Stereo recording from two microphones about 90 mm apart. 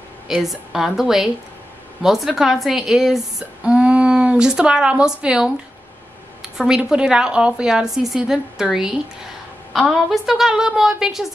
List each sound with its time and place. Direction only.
0.3 s a woman's voice: centre (ahead or behind)